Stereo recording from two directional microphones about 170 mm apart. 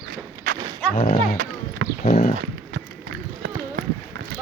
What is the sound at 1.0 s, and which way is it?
Music, 35° left (ahead or behind).